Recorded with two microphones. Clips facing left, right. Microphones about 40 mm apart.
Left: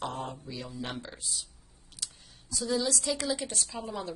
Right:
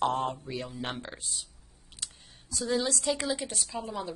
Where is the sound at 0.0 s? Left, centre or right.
Right.